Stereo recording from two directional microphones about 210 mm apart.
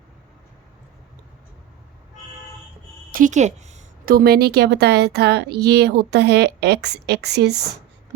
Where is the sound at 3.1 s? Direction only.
40° right (ahead or behind).